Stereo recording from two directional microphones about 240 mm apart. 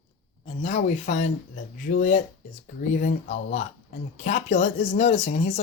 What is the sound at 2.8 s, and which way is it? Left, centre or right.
Speech, left.